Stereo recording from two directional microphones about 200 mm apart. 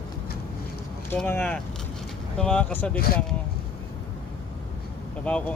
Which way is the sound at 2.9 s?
50° left (ahead or behind).